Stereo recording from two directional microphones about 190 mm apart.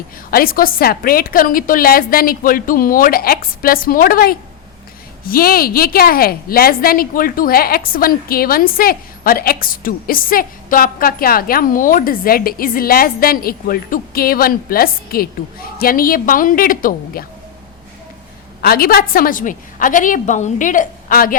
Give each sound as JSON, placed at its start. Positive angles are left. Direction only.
{"t": 0.3, "sound": "a woman's voice", "side_deg": 50}
{"t": 18.6, "sound": "a woman's voice", "side_deg": 50}